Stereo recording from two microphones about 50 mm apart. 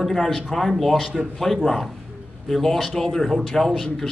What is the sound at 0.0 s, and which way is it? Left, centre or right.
A man's voice, centre.